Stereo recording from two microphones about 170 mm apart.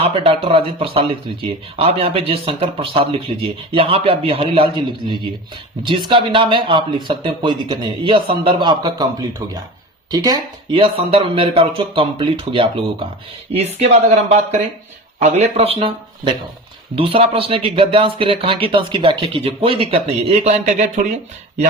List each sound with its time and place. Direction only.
0.0 s speech: 30° right (ahead or behind)
10.1 s speech: 20° right (ahead or behind); by 21.2 s 45° right (ahead or behind)